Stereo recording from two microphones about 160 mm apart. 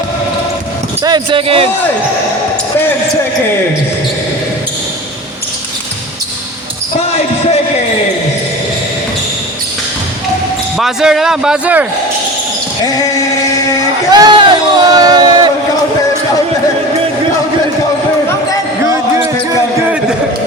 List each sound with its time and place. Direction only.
1.0 s speech: 30° right (ahead or behind)
10.8 s a man's voice: centre (ahead or behind)
12.8 s speech: 20° left (ahead or behind)
14.1 s a sound: 25° right (ahead or behind)
18.9 s basketball bounce: 20° right (ahead or behind)